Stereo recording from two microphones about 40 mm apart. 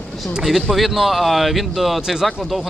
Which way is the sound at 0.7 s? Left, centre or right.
Centre.